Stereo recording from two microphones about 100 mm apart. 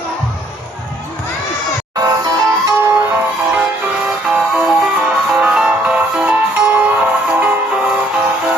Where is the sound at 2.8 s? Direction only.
20° right (ahead or behind).